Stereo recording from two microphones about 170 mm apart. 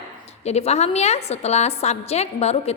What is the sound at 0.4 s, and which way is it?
A woman's voice, 40° left (ahead or behind).